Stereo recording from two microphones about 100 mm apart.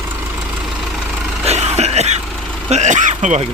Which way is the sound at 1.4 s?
90° right.